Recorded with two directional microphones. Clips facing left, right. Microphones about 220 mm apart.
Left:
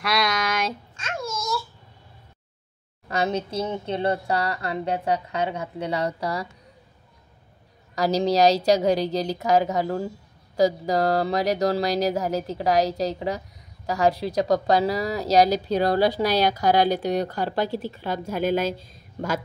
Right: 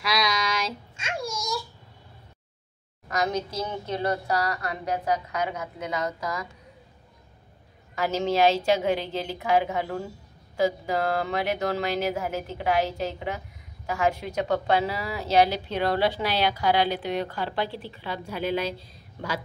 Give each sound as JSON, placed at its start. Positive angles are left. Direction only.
{"t": 0.9, "sound": "babbling", "side_deg": -10}
{"t": 3.1, "sound": "a sound", "side_deg": 30}
{"t": 3.6, "sound": "a woman's voice", "side_deg": 30}
{"t": 7.9, "sound": "a woman's voice", "side_deg": 35}